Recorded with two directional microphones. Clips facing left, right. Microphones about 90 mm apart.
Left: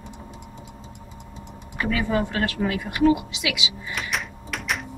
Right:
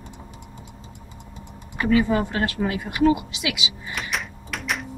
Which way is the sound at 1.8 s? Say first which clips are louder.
Right 4 dB; 25° right (ahead or behind).